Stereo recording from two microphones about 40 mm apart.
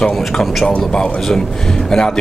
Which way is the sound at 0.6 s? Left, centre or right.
Left.